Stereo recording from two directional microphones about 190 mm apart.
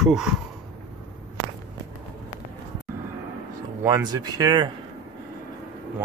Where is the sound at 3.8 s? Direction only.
20° right (ahead or behind).